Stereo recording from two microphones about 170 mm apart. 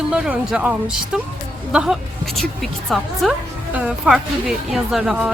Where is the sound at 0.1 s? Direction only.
5° right (ahead or behind).